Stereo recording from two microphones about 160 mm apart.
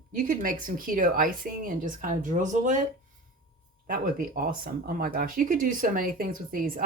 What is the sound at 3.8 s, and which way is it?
Speech, 65° right (ahead or behind).